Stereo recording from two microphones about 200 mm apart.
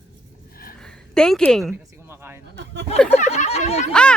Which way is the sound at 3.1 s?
35° left (ahead or behind).